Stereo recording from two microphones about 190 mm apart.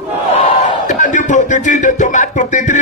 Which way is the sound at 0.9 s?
40° left (ahead or behind).